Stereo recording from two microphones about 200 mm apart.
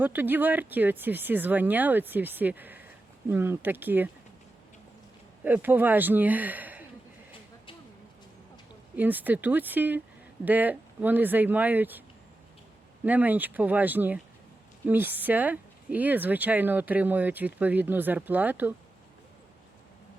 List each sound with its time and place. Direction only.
0.0 s speech: 10° right (ahead or behind)
5.4 s speech: 10° right (ahead or behind)
9.0 s speech: 10° right (ahead or behind)
13.1 s speech: 10° right (ahead or behind)